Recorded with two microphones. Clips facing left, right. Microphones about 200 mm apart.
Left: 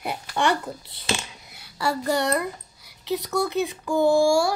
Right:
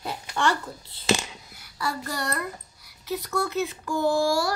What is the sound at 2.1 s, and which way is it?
Speech, 20° left (ahead or behind).